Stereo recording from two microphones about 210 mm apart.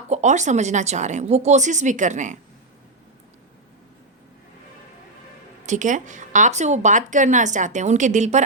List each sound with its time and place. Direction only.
0.1 s a woman's voice: 35° right (ahead or behind)
5.6 s a woman's voice: 35° right (ahead or behind)